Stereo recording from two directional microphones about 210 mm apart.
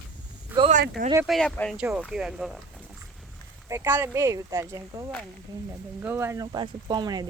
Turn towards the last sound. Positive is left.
turn(degrees=-20)  # may be behind; listen again after turning